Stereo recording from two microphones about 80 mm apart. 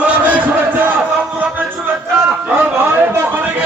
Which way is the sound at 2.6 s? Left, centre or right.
Right.